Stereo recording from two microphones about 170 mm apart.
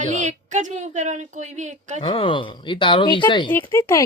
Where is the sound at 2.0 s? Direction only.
30° left (ahead or behind).